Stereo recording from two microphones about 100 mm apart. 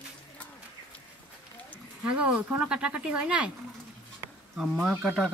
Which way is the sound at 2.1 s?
15° right (ahead or behind).